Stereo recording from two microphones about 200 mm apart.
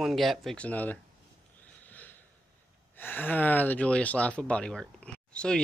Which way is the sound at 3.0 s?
10° left (ahead or behind).